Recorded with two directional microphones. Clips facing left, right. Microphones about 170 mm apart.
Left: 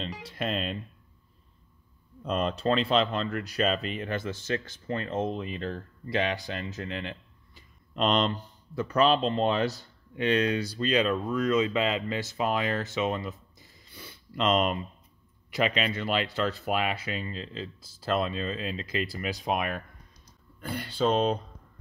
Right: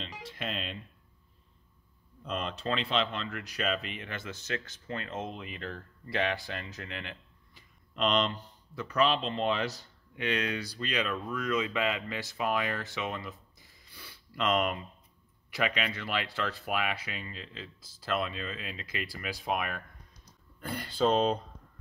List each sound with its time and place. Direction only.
0.0 s speech: 40° left (ahead or behind)
2.2 s speech: 40° left (ahead or behind)
6.0 s speech: 20° left (ahead or behind)
20.6 s speech: centre (ahead or behind)